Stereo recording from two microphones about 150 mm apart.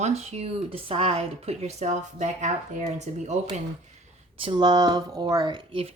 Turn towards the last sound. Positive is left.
turn(degrees=-35)  # may be behind; listen again after turning